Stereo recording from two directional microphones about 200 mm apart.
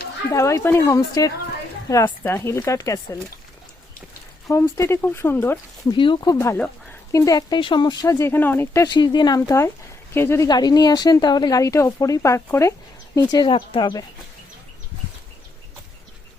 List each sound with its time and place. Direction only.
0.3 s speech: 15° left (ahead or behind)
4.4 s speech: 15° left (ahead or behind)
6.0 s speech: 20° left (ahead or behind)